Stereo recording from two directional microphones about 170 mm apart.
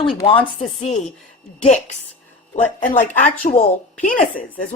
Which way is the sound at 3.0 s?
50° left (ahead or behind).